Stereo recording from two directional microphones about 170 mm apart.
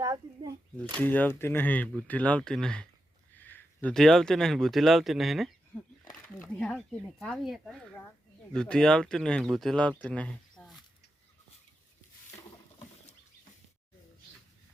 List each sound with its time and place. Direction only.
0.0 s a child's voice: 20° right (ahead or behind)
1.0 s speech: 10° left (ahead or behind)